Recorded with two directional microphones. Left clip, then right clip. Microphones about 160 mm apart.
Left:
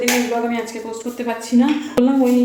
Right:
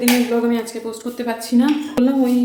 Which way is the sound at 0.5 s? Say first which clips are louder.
Right 1 dB; 35° right (ahead or behind).